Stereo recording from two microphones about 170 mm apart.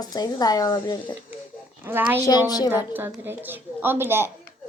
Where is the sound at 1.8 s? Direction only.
10° right (ahead or behind).